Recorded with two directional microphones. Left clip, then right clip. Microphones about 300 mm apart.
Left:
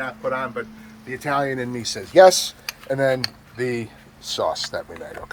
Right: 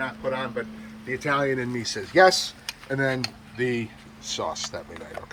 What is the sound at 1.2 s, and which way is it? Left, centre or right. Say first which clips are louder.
Speech: left 2 dB; left.